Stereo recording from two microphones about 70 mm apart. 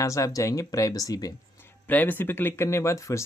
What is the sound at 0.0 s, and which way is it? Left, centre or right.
Speech, left.